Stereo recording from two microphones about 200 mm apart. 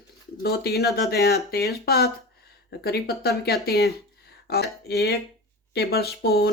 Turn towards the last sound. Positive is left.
turn(degrees=55)  # may be behind; listen again after turning